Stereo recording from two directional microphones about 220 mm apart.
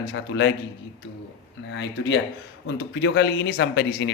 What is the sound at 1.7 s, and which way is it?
A man's voice, 55° left (ahead or behind).